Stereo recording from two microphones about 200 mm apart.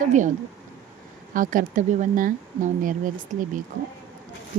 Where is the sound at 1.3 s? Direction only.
40° right (ahead or behind).